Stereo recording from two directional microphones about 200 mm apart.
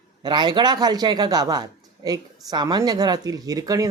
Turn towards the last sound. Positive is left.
turn(degrees=-15)  # may be behind; listen again after turning